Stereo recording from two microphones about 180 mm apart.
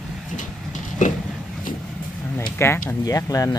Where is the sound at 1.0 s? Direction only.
45° left (ahead or behind).